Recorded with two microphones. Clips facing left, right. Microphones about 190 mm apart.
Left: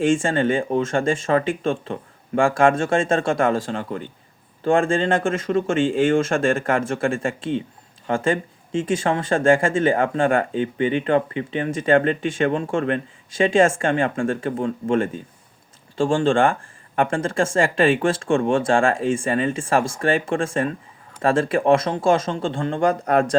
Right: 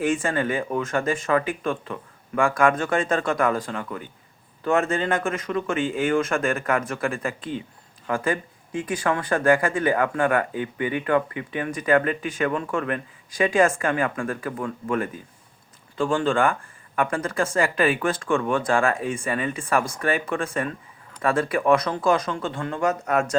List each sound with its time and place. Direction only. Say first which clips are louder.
0.0 s speech: left 4 dB; 30° left (ahead or behind)